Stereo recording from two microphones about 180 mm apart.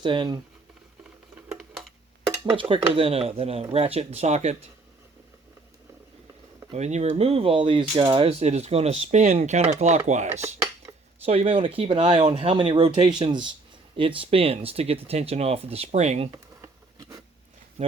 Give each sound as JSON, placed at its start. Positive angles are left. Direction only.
{"t": 0.0, "sound": "speech", "side_deg": -25}
{"t": 1.5, "sound": "a sound", "side_deg": 0}
{"t": 2.6, "sound": "speech", "side_deg": -30}
{"t": 6.7, "sound": "speech", "side_deg": -40}